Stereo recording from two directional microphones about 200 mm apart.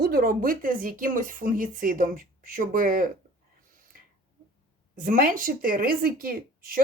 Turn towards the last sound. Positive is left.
turn(degrees=-45)  # may be behind; listen again after turning